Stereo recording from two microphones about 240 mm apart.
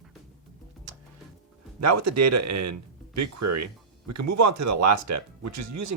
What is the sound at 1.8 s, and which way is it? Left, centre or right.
Speech, right.